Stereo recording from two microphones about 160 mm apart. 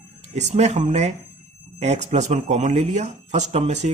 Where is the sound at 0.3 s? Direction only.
45° right (ahead or behind).